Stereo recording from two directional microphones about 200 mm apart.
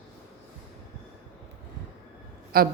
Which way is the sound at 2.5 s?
50° right (ahead or behind).